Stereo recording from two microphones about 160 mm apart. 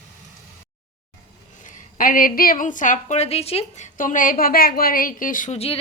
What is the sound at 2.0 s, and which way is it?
A woman's voice, 60° left (ahead or behind).